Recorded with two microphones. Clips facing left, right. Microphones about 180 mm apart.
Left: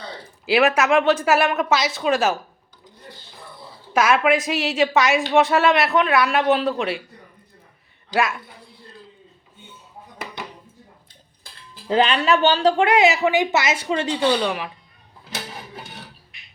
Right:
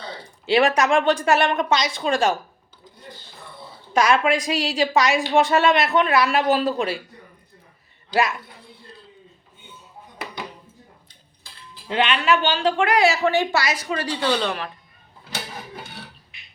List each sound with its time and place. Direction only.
0.4 s a woman's voice: 5° left (ahead or behind)
3.9 s a woman's voice: 5° left (ahead or behind)
8.1 s a woman's voice: centre (ahead or behind)
11.9 s a woman's voice: 35° left (ahead or behind); by 14.7 s 10° left (ahead or behind)